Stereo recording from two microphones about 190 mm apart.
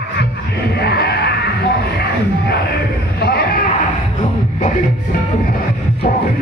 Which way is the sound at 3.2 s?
55° left (ahead or behind).